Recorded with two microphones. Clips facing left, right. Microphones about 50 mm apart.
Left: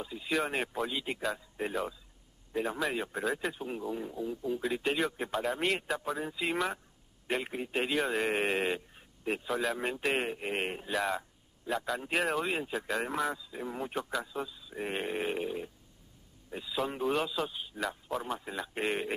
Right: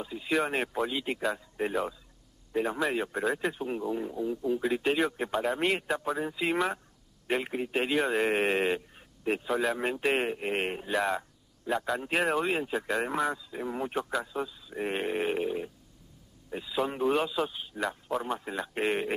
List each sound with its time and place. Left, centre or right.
0.0 s a man's voice: centre